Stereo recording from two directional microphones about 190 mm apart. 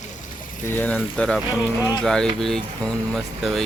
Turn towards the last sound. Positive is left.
turn(degrees=0)  # may be behind; listen again after turning